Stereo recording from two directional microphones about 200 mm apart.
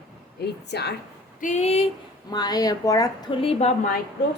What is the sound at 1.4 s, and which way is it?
Speech, 35° left (ahead or behind).